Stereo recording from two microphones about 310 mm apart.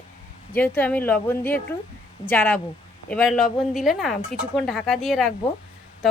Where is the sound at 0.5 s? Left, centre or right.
Centre.